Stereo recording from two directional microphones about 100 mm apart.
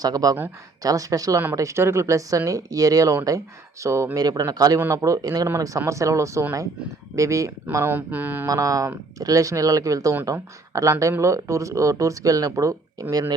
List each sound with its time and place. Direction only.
0.0 s speech: 40° right (ahead or behind)
7.9 s speech: 15° right (ahead or behind)
8.4 s speech: 35° right (ahead or behind)